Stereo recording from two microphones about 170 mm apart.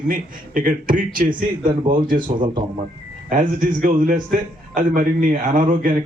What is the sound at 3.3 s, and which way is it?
A man's voice, 50° right (ahead or behind).